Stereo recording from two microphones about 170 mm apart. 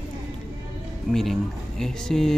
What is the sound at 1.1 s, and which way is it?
Speech, centre (ahead or behind).